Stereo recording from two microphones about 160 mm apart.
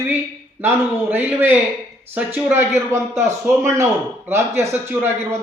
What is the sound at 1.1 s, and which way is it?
A man's voice, 10° right (ahead or behind).